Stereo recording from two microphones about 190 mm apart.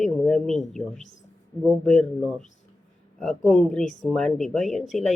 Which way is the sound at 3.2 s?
5° left (ahead or behind).